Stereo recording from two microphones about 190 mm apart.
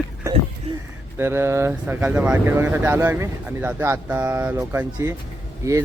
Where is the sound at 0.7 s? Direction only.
30° right (ahead or behind).